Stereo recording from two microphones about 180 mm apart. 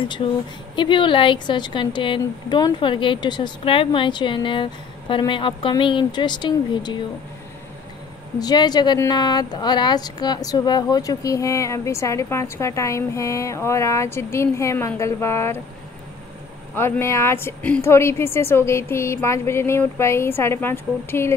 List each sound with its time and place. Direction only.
0.7 s a woman's voice: 25° left (ahead or behind)
8.4 s a woman's voice: 20° left (ahead or behind)
16.7 s a woman's voice: 15° left (ahead or behind)